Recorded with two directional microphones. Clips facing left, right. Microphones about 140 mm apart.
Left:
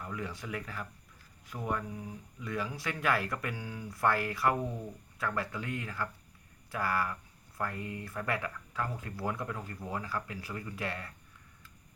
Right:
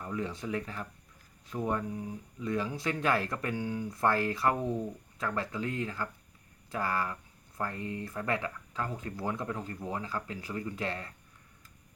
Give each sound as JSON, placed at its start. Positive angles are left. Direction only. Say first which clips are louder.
{"t": 0.0, "sound": "speech", "louder": "right 4 dB", "side_deg": -25}